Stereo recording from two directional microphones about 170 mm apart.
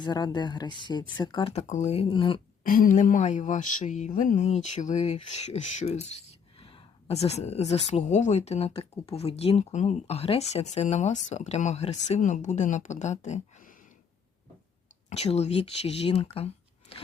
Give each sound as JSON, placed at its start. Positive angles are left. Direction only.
{"t": 0.0, "sound": "speech", "side_deg": 25}
{"t": 1.6, "sound": "speech", "side_deg": 45}
{"t": 2.6, "sound": "speech", "side_deg": 55}
{"t": 15.1, "sound": "speech", "side_deg": 40}
{"t": 16.9, "sound": "a sound", "side_deg": 35}